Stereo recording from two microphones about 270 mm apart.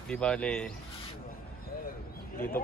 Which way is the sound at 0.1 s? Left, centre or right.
Centre.